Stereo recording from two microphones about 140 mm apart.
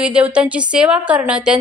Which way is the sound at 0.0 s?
5° right (ahead or behind).